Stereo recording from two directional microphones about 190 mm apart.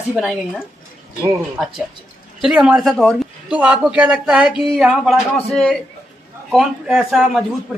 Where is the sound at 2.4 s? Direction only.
5° right (ahead or behind).